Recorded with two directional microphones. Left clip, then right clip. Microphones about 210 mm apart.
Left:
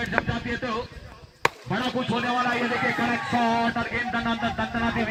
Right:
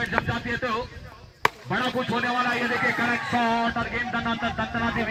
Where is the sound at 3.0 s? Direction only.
15° left (ahead or behind).